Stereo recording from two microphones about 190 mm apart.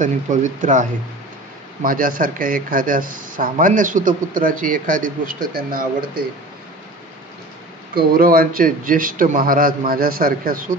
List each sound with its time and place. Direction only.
0.0 s speech: 40° right (ahead or behind)
7.9 s speech: 50° right (ahead or behind)